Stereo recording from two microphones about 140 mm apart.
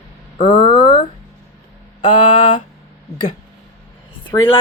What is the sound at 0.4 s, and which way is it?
Speech, 35° left (ahead or behind).